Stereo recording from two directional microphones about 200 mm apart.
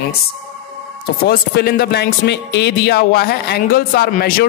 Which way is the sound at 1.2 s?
55° left (ahead or behind).